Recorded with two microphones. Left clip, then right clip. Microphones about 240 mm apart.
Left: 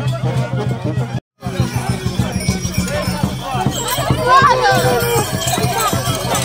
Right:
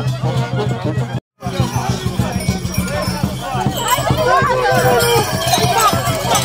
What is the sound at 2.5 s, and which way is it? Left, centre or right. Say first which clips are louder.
Music: left 1 dB; centre.